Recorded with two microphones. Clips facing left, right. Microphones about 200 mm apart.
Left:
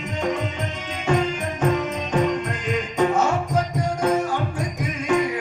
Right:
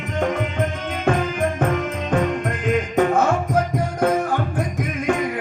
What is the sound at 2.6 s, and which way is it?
Music, 55° right (ahead or behind).